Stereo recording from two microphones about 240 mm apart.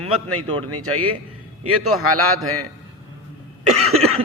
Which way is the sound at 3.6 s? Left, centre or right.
Right.